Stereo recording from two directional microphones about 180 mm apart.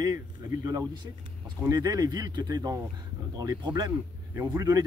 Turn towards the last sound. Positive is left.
turn(degrees=-20)  # may be behind; listen again after turning